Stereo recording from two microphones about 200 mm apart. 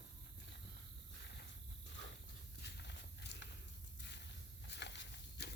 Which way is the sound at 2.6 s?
60° left (ahead or behind).